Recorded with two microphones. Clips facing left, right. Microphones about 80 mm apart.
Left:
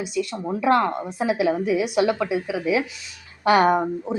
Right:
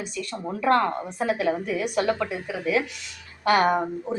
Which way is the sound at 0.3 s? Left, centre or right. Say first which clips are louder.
Left 1 dB; centre.